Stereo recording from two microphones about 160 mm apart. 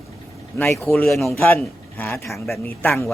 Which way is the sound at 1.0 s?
5° left (ahead or behind).